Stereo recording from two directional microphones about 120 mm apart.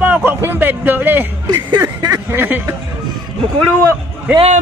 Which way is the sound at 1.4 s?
35° right (ahead or behind).